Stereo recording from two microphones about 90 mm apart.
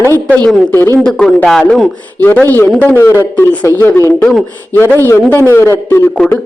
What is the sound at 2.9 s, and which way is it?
Speech, 30° left (ahead or behind).